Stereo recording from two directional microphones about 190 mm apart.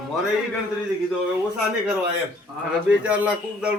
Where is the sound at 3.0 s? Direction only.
5° right (ahead or behind).